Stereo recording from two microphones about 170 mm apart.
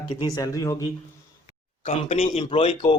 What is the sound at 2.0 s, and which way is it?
Speech, 40° left (ahead or behind).